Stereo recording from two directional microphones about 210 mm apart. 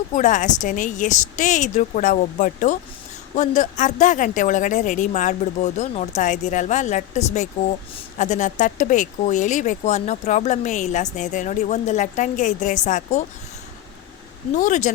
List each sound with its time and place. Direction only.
0.2 s speech: 35° left (ahead or behind)
14.5 s speech: 35° left (ahead or behind)